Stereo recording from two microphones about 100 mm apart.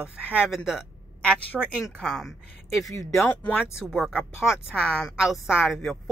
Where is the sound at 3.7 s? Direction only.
5° right (ahead or behind).